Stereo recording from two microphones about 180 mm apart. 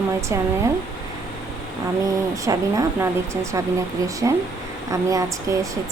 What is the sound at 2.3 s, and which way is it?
Speech, 20° right (ahead or behind).